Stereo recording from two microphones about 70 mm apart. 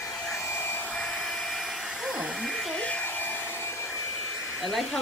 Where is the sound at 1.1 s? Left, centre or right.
Centre.